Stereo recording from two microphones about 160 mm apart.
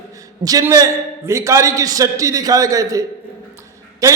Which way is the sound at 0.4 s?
20° right (ahead or behind).